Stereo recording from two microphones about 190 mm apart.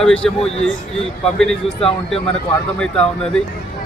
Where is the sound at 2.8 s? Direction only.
5° left (ahead or behind).